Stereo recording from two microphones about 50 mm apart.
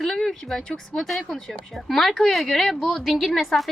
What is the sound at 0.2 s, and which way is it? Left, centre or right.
A woman's voice, centre.